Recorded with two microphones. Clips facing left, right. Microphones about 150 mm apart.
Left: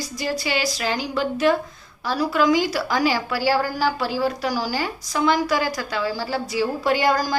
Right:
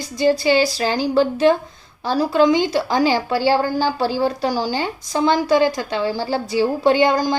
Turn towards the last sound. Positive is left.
turn(degrees=-20)  # may be behind; listen again after turning